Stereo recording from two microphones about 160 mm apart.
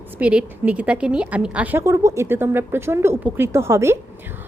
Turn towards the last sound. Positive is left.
turn(degrees=-15)  # may be behind; listen again after turning